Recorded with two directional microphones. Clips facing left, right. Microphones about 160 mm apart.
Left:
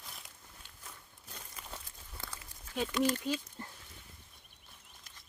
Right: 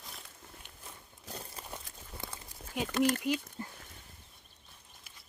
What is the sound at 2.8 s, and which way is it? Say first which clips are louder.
Speech: right 2 dB; 55° right (ahead or behind).